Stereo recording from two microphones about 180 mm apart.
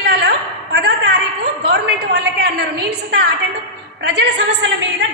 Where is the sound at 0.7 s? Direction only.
65° right (ahead or behind).